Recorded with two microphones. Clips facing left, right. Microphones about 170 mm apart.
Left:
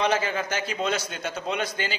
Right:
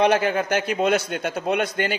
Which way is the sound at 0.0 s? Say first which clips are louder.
Right 6 dB; 60° right (ahead or behind).